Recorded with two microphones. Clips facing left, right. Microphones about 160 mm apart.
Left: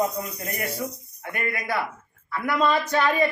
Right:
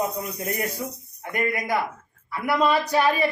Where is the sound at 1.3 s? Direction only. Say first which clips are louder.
Right 3 dB; 15° right (ahead or behind).